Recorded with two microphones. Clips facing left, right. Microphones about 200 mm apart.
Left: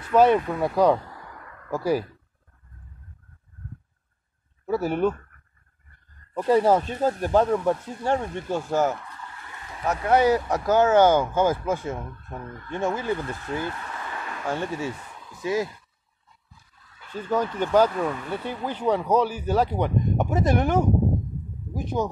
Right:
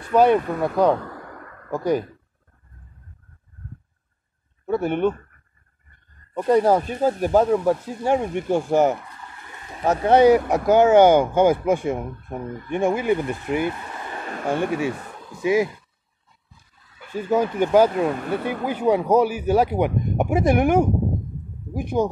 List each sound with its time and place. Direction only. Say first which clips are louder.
0.1 s speech: right 2 dB; centre (ahead or behind)
1.0 s a sound: right 6 dB; 55° right (ahead or behind)
1.7 s speech: right 2 dB; 5° left (ahead or behind)
4.6 s speech: right 2 dB; 5° left (ahead or behind)
6.5 s speech: right 2 dB; centre (ahead or behind); by 14.2 s 25° right (ahead or behind)
14.2 s speech: right 6 dB; 45° right (ahead or behind)
14.9 s a sound: right 6 dB; 65° right (ahead or behind)
15.4 s speech: right 6 dB; 15° right (ahead or behind)
17.1 s speech: right 4 dB; 10° right (ahead or behind)
17.8 s speech: right 4 dB; 20° right (ahead or behind)
18.1 s speech: right 6 dB; 50° right (ahead or behind)
18.9 s speech: right 4 dB; 10° right (ahead or behind)